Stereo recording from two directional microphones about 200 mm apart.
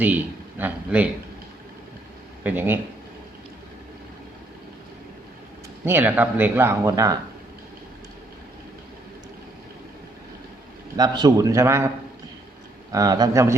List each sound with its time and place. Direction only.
0.6 s speech: 5° right (ahead or behind)
2.4 s speech: 10° right (ahead or behind)
5.8 s speech: 10° right (ahead or behind)
10.9 s speech: 20° right (ahead or behind)
12.9 s speech: 15° right (ahead or behind)